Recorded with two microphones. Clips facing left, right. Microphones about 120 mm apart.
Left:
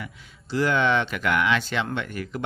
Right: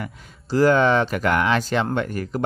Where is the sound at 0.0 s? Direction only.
40° right (ahead or behind).